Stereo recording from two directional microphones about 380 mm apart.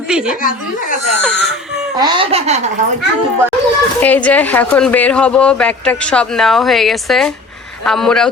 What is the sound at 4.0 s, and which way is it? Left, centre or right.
Speech, centre.